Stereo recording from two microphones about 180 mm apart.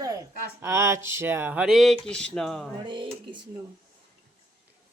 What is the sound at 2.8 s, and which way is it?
Speech, 25° right (ahead or behind).